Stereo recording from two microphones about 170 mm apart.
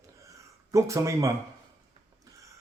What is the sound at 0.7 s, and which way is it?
Speech, 20° right (ahead or behind).